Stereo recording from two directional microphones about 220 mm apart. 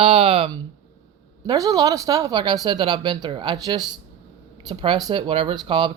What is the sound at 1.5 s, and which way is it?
Speech, 15° right (ahead or behind).